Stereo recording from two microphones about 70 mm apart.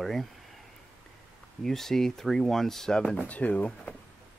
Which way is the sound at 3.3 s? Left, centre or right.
Left.